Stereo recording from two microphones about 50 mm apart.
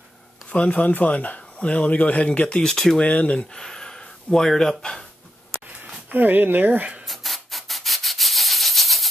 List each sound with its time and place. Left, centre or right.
0.5 s speech: left
2.7 s speech: centre
3.0 s speech: left
3.5 s gasp: centre
6.1 s speech: right
7.1 s rub: centre